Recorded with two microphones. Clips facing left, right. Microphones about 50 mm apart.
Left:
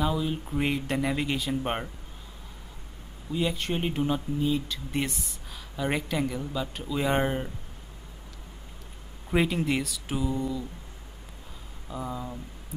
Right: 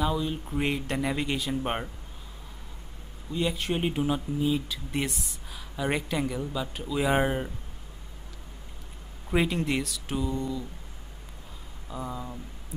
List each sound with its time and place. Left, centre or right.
0.0 s speech: centre
3.3 s speech: centre
9.3 s speech: centre
11.9 s speech: centre